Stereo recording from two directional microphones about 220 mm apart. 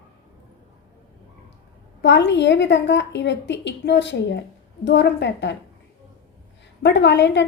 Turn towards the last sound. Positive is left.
turn(degrees=55)  # may be behind; listen again after turning